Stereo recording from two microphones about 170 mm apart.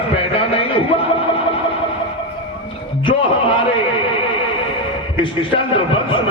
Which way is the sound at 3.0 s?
30° left (ahead or behind).